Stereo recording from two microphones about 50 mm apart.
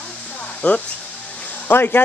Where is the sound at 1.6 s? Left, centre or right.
Left.